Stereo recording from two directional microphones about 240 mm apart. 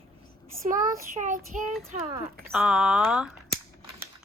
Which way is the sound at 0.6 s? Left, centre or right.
Right.